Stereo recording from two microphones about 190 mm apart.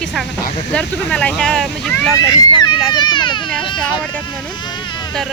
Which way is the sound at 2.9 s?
25° left (ahead or behind).